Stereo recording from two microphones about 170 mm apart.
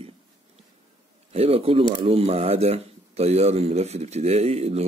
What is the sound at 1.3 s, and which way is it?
Speech, 35° right (ahead or behind).